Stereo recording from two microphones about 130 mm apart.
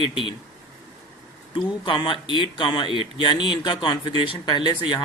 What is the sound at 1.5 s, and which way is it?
Speech, 40° left (ahead or behind).